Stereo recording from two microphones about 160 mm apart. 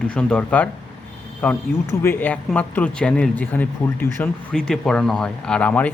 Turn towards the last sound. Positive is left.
turn(degrees=10)  # may be behind; listen again after turning